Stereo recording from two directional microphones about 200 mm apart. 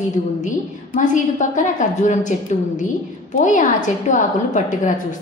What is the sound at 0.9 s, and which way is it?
Speech, 40° left (ahead or behind).